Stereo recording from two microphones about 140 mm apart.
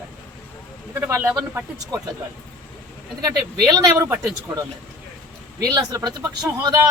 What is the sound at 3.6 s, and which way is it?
Speech, 30° right (ahead or behind).